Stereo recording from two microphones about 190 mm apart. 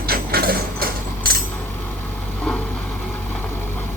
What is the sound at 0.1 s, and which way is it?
Mechanisms, 55° right (ahead or behind).